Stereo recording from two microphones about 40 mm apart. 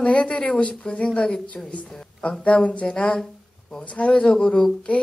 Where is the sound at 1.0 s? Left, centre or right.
Centre.